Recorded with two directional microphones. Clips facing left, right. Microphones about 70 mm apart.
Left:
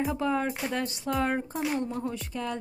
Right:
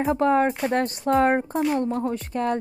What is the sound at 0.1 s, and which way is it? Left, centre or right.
Speech, right.